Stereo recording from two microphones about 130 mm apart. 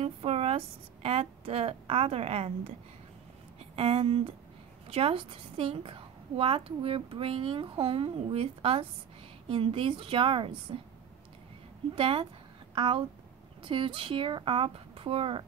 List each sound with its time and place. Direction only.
0.0 s a woman's voice: 50° right (ahead or behind)
3.7 s a woman's voice: 50° right (ahead or behind)
11.9 s a woman's voice: 45° right (ahead or behind)